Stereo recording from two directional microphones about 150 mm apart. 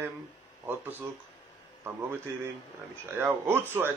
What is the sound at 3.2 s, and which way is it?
Speech, 15° right (ahead or behind).